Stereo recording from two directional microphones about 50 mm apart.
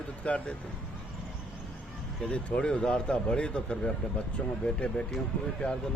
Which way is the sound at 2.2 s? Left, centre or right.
Left.